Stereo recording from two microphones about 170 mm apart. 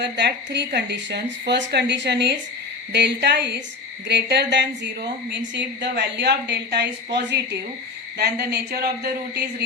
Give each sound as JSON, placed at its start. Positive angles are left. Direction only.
{"t": 0.0, "sound": "speech", "side_deg": -85}